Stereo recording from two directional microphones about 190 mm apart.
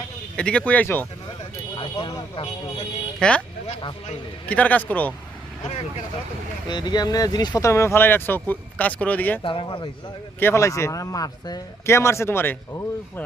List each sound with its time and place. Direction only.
0.3 s a man's voice: 5° left (ahead or behind)
1.7 s speech: 25° left (ahead or behind)
3.2 s speech: 5° left (ahead or behind)
4.4 s a man's voice: 10° left (ahead or behind)
6.7 s a man's voice: 20° left (ahead or behind)
9.4 s speech: 25° left (ahead or behind)
10.4 s a man's voice: 15° left (ahead or behind)